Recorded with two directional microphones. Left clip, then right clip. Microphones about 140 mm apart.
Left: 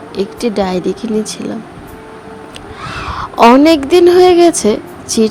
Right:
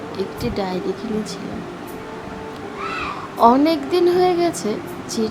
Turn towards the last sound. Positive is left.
turn(degrees=65)  # may be behind; listen again after turning